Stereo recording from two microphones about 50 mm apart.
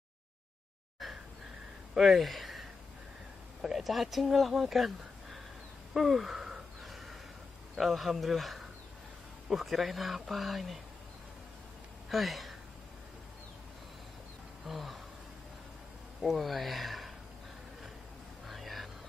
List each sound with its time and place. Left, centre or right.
1.0 s a sound: centre
2.0 s speech: centre
3.6 s speech: centre
5.9 s a sound: centre
7.7 s speech: centre
12.1 s speech: centre
14.7 s speech: centre
16.2 s speech: centre
18.5 s a sound: centre